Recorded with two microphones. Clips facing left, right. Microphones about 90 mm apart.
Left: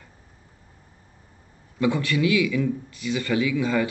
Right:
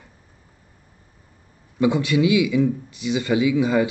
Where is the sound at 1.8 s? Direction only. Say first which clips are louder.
Right 4 dB; 20° right (ahead or behind).